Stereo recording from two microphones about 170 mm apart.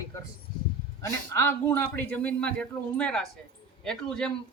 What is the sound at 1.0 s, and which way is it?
A man's voice, 15° left (ahead or behind).